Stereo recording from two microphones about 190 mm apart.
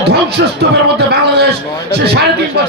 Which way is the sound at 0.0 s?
60° right (ahead or behind).